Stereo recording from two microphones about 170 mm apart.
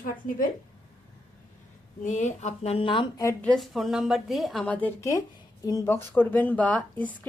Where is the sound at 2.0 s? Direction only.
45° left (ahead or behind); by 3.2 s 30° left (ahead or behind).